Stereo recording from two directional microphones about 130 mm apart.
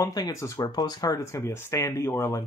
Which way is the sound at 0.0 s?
30° left (ahead or behind).